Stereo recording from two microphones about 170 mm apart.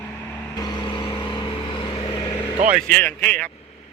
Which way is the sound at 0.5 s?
25° left (ahead or behind).